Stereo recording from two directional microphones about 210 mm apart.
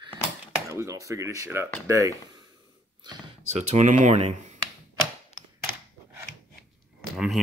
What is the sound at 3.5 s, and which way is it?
Speech, 35° right (ahead or behind).